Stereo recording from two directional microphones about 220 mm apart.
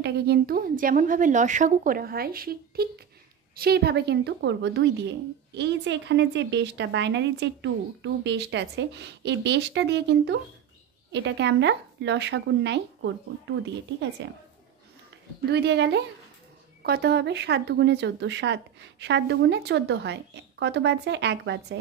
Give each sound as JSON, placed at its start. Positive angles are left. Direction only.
{"t": 0.0, "sound": "a woman's voice", "side_deg": -45}
{"t": 14.2, "sound": "a woman's voice", "side_deg": -55}
{"t": 15.5, "sound": "speech", "side_deg": -50}